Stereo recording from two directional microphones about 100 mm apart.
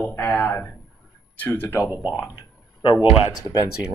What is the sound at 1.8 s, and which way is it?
Speech, 15° right (ahead or behind).